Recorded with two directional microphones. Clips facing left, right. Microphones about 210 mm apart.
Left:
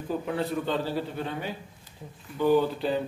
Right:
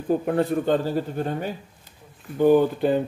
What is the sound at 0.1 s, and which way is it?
Speech, 50° right (ahead or behind).